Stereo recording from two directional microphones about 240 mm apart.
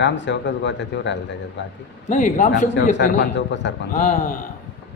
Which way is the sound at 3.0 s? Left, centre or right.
Left.